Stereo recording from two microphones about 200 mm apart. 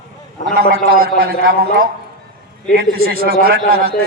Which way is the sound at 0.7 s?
50° right (ahead or behind).